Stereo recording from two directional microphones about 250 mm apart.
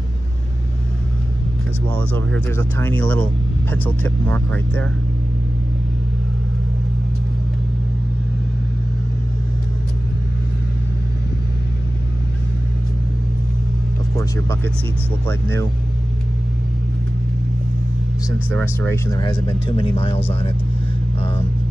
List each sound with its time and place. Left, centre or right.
2.3 s speech: centre
14.1 s speech: centre
18.5 s speech: centre